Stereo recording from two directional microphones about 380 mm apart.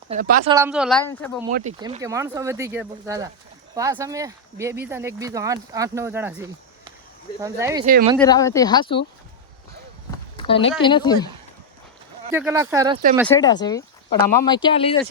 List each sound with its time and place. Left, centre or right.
0.1 s speech: centre
0.5 s a woman's voice: centre
1.5 s speech: centre
7.9 s speech: right
8.2 s speech: centre
10.3 s speech: centre
12.3 s speech: centre
13.1 s speech: centre